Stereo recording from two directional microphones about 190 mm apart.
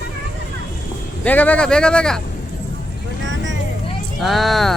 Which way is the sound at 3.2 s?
75° right (ahead or behind).